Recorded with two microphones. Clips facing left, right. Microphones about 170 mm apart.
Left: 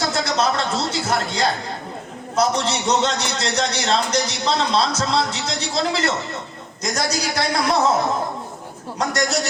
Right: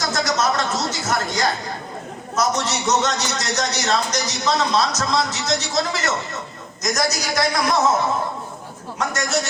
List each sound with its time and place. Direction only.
0.0 s a man's voice: 30° left (ahead or behind)
9.0 s a man's voice: 35° left (ahead or behind)